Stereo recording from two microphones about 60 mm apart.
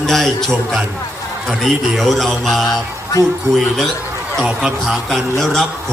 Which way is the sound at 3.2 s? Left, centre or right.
Left.